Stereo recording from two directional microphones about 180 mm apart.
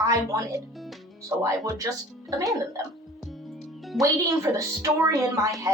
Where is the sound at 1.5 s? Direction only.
20° right (ahead or behind).